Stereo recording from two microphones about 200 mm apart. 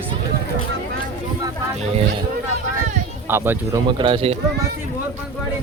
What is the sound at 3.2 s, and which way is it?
Speech, 10° right (ahead or behind).